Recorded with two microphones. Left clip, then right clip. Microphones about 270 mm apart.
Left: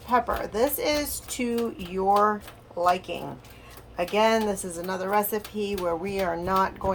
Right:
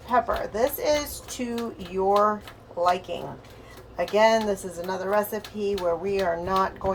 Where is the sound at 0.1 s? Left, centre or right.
Left.